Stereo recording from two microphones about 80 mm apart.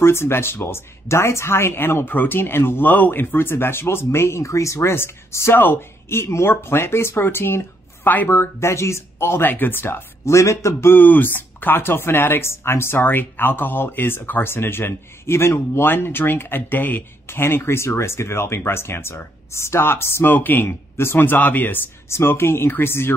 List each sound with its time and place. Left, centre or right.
0.0 s speech: left